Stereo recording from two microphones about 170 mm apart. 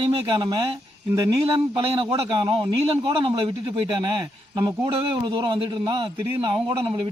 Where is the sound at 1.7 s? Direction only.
30° right (ahead or behind).